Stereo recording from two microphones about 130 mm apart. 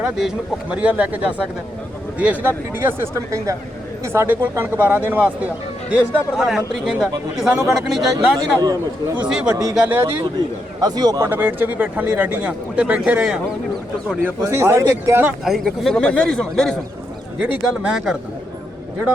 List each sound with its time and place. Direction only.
0.0 s a man's voice: 5° right (ahead or behind)
8.4 s a man's voice: 30° right (ahead or behind)
9.1 s a man's voice: 10° right (ahead or behind)
10.3 s a man's voice: 30° right (ahead or behind)
11.3 s a man's voice: 15° right (ahead or behind)
14.3 s speech: 20° right (ahead or behind)
15.4 s a man's voice: centre (ahead or behind)
17.4 s a man's voice: 5° right (ahead or behind)